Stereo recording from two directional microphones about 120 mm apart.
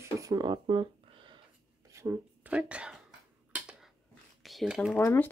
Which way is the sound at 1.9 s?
25° right (ahead or behind).